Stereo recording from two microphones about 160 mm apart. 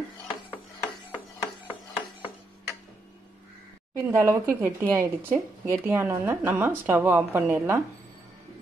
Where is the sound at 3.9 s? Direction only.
15° right (ahead or behind).